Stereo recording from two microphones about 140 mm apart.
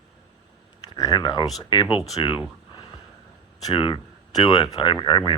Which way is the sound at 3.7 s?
35° left (ahead or behind).